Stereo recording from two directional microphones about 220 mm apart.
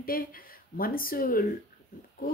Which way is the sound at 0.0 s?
40° left (ahead or behind).